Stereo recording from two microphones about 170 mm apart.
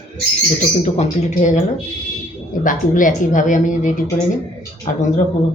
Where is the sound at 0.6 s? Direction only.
40° left (ahead or behind).